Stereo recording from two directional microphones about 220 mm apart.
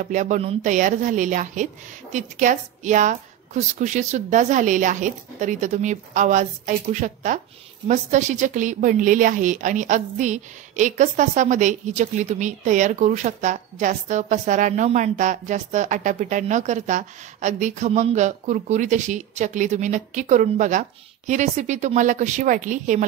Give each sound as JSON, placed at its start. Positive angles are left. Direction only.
{"t": 0.0, "sound": "a woman's voice", "side_deg": -35}